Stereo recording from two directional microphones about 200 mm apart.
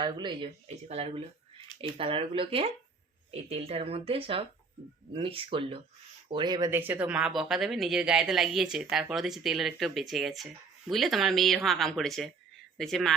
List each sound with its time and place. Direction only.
0.0 s speech: 20° right (ahead or behind); by 13.1 s centre (ahead or behind)